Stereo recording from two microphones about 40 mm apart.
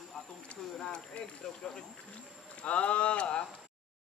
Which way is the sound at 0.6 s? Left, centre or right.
Centre.